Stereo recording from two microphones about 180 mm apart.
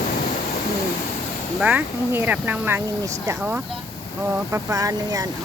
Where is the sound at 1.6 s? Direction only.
10° right (ahead or behind).